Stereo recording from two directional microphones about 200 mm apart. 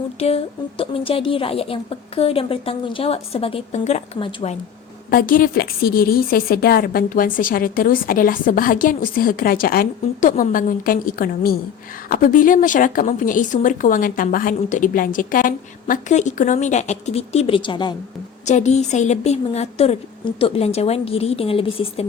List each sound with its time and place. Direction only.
0.2 s a woman's voice: 30° left (ahead or behind)
5.1 s a woman's voice: 45° left (ahead or behind); by 17.9 s 25° left (ahead or behind)
18.4 s a woman's voice: 35° left (ahead or behind)